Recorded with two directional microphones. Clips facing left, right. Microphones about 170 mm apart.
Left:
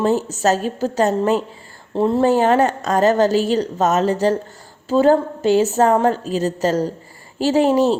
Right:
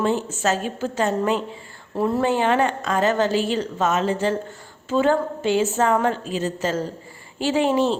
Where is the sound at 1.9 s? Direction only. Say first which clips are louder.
Left 5 dB; 25° left (ahead or behind).